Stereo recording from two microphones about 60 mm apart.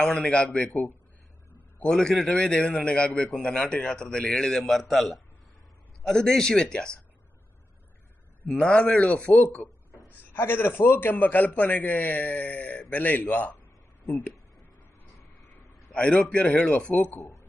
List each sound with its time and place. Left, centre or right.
0.0 s a man's voice: centre
0.3 s a man's voice: centre
1.9 s a man's voice: centre
8.5 s a man's voice: centre
10.3 s a man's voice: left
15.9 s a man's voice: centre